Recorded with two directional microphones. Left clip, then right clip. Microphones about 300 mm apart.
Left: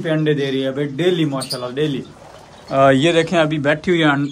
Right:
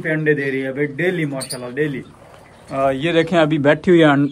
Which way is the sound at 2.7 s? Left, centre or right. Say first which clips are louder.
Left 6 dB; left.